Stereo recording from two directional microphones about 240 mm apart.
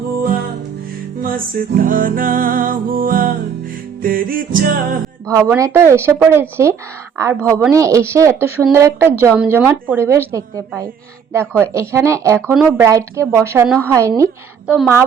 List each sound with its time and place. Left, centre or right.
1.2 s music: right
5.3 s speech: centre